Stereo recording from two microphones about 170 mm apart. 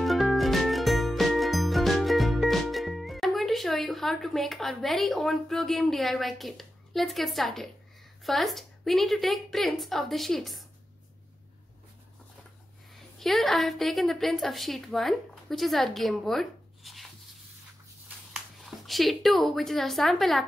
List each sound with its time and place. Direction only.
0.0 s music: centre (ahead or behind)
8.2 s a woman's voice: centre (ahead or behind)
13.2 s a woman's voice: centre (ahead or behind)
18.3 s a woman's voice: centre (ahead or behind)